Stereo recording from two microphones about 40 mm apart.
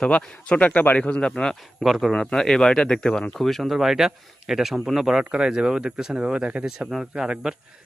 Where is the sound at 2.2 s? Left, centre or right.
Centre.